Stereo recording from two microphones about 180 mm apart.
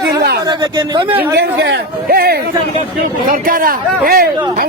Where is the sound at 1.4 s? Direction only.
65° right (ahead or behind).